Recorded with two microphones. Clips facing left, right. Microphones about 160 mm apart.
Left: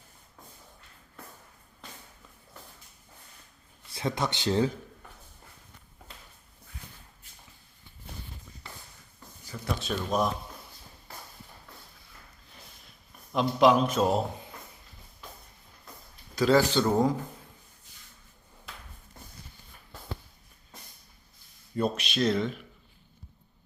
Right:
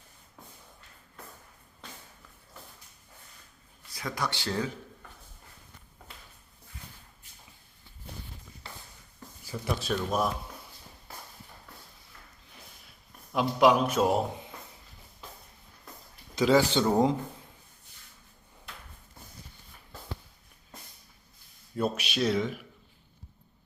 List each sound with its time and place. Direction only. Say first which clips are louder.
3.9 s speech: left 3 dB; 25° left (ahead or behind)
9.5 s speech: right 2 dB; 5° right (ahead or behind)
13.3 s a man's voice: left 1 dB; 10° right (ahead or behind)
16.3 s a man's voice: even; 15° right (ahead or behind)
21.8 s a man's voice: left 1 dB; 5° right (ahead or behind)